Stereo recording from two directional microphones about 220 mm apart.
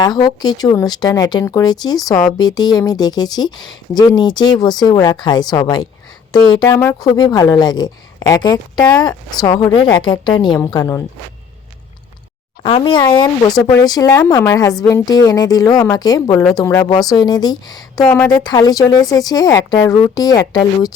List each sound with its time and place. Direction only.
0.0 s speech: 20° left (ahead or behind)
12.6 s speech: 25° left (ahead or behind)